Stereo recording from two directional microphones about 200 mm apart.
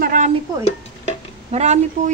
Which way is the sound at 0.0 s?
40° right (ahead or behind).